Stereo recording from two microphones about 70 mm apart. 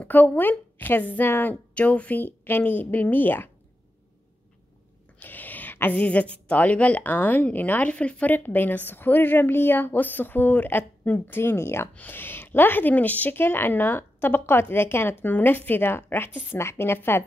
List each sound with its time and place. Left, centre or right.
0.0 s speech: left
5.2 s a sound: left
5.9 s speech: centre; by 11.9 s left
11.9 s a woman's voice: left